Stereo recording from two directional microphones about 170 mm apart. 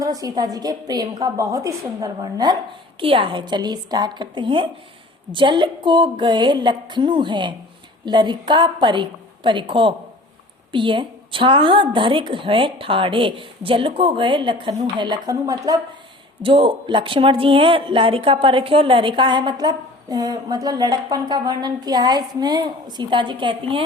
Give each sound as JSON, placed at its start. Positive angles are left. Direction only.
{"t": 0.0, "sound": "a woman's voice", "side_deg": -20}
{"t": 16.4, "sound": "a woman's voice", "side_deg": -30}